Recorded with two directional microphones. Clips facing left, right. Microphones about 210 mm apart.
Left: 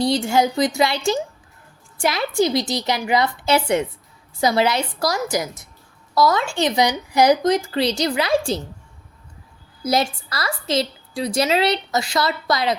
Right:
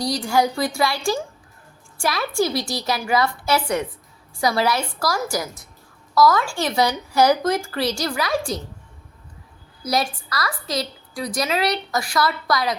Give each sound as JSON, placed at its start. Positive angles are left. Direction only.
{"t": 0.0, "sound": "a woman's voice", "side_deg": 25}
{"t": 9.8, "sound": "a woman's voice", "side_deg": 25}